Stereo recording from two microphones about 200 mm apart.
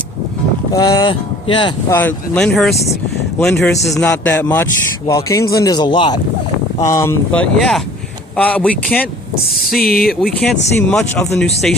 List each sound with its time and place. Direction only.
0.7 s speech: 20° left (ahead or behind)
1.9 s speech: 10° left (ahead or behind)
3.9 s speech: 10° left (ahead or behind)
7.3 s speech: 5° left (ahead or behind)
9.8 s speech: 50° left (ahead or behind)
10.2 s speech: centre (ahead or behind)